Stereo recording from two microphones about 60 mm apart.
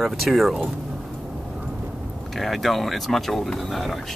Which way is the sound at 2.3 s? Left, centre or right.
Centre.